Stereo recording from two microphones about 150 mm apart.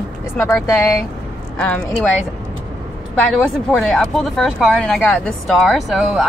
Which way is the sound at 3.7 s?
5° left (ahead or behind).